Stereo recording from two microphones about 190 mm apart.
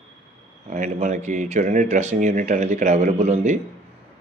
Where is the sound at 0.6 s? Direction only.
40° right (ahead or behind).